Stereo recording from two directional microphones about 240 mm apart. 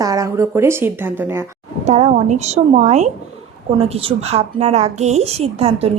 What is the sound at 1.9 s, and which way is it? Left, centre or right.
A woman's voice, right.